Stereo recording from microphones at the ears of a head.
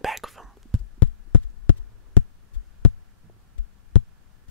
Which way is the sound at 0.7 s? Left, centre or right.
Left.